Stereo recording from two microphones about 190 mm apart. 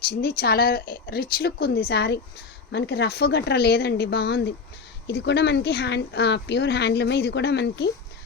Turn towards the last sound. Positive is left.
turn(degrees=65)  # may be behind; listen again after turning